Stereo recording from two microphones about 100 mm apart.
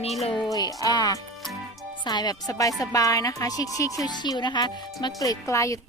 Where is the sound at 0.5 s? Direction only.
40° left (ahead or behind).